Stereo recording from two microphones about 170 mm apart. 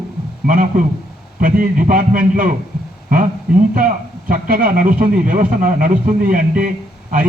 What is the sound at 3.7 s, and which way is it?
A man's voice, 55° right (ahead or behind).